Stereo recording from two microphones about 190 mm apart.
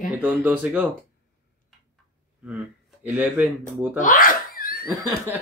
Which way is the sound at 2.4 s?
10° right (ahead or behind).